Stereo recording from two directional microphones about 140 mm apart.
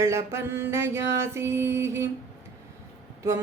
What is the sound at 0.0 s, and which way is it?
Mantra, 20° right (ahead or behind).